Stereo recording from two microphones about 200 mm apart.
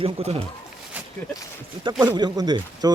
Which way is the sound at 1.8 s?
25° right (ahead or behind).